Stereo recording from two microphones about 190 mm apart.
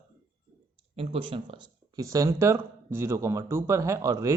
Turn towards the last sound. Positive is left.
turn(degrees=-15)  # may be behind; listen again after turning